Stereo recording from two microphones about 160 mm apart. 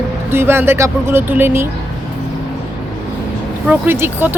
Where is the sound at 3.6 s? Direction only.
15° right (ahead or behind).